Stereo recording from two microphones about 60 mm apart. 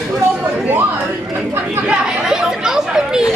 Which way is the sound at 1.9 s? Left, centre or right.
Centre.